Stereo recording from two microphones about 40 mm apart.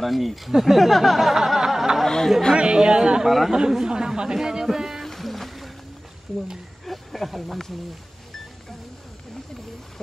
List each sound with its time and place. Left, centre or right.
0.0 s speech: centre
1.3 s a sound: centre
2.0 s speech: centre
2.5 s speech: right
5.0 s boat: centre
6.9 s speech: centre